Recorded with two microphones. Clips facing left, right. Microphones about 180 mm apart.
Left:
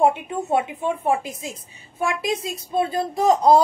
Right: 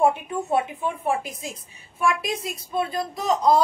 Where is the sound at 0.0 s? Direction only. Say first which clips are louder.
Left 2 dB; 20° left (ahead or behind).